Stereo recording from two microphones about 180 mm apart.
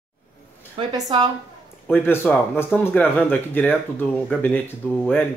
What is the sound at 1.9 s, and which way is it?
Speech, 10° left (ahead or behind).